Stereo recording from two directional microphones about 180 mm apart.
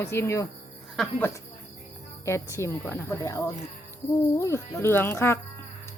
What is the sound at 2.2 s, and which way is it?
A woman's voice, 15° left (ahead or behind).